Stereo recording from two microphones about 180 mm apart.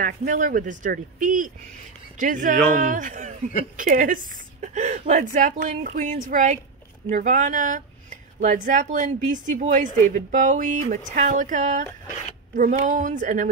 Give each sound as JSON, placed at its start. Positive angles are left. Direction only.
{"t": 0.0, "sound": "speech", "side_deg": -45}